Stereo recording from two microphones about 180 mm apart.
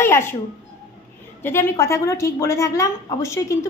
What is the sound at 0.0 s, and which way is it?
Music, 15° left (ahead or behind).